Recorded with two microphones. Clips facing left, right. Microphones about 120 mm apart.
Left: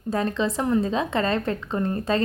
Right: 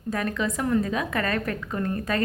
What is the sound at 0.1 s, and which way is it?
A woman's voice, 25° left (ahead or behind).